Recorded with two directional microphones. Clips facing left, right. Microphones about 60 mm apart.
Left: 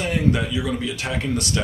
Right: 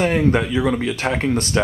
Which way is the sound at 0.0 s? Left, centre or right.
Right.